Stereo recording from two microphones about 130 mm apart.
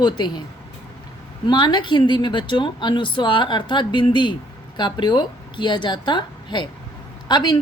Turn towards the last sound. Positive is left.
turn(degrees=35)  # may be behind; listen again after turning